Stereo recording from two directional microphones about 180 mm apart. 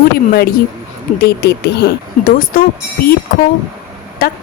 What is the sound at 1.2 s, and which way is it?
Speech, 65° left (ahead or behind).